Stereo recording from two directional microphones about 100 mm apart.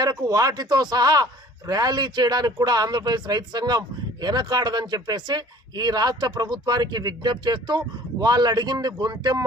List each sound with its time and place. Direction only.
0.0 s a man's voice: 40° right (ahead or behind)